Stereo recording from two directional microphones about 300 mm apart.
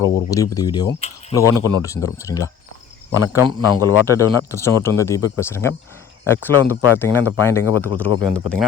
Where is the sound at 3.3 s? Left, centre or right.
Centre.